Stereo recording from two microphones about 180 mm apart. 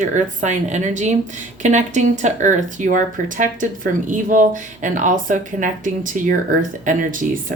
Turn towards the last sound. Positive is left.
turn(degrees=-45)  # may be behind; listen again after turning